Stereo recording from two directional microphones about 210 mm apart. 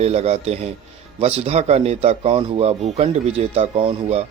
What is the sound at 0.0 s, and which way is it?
A man's voice, 30° right (ahead or behind).